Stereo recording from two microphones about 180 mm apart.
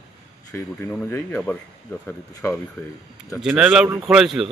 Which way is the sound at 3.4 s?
10° right (ahead or behind).